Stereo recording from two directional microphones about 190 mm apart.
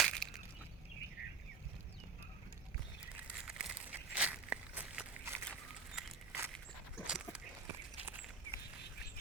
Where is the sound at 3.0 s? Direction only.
5° right (ahead or behind).